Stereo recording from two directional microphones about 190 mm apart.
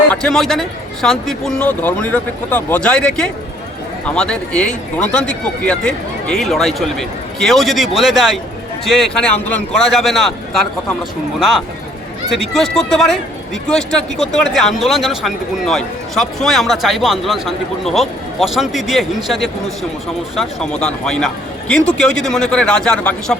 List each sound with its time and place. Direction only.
0.1 s a man's voice: 5° left (ahead or behind)
12.3 s speech: centre (ahead or behind)